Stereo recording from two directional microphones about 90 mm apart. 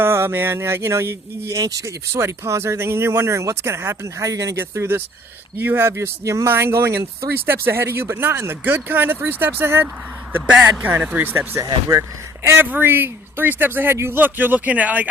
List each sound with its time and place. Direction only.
0.0 s speech: 25° right (ahead or behind)
2.1 s speech: 30° right (ahead or behind)
10.3 s speech: 15° right (ahead or behind)
11.6 s speech: 35° right (ahead or behind)
12.5 s speech: 20° right (ahead or behind)